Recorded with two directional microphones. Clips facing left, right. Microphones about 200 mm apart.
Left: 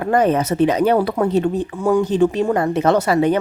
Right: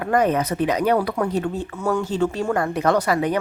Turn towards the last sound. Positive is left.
turn(degrees=25)  # may be behind; listen again after turning